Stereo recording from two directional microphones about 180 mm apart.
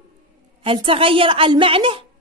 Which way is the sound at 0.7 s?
30° right (ahead or behind).